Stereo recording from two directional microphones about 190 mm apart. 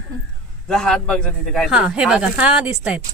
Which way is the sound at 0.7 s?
5° left (ahead or behind).